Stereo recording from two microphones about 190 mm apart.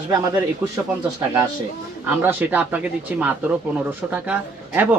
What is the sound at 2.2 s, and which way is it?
Speech, 10° right (ahead or behind).